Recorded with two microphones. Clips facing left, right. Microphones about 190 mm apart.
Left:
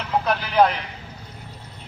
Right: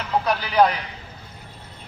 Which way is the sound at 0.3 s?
Centre (ahead or behind).